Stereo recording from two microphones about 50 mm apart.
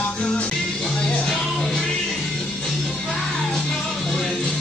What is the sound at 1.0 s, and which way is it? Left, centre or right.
Music, left.